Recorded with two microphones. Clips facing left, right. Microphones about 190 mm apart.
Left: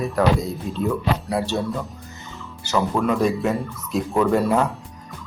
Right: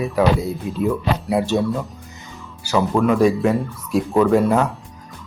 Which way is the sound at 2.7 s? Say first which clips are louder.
Right 4 dB; 10° right (ahead or behind).